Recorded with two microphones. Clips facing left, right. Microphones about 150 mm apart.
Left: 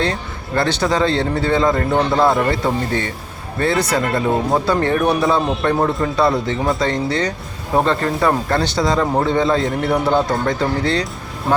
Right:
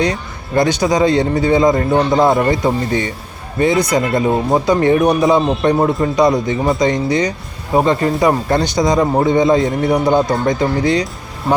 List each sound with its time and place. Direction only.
0.0 s speech: 15° right (ahead or behind)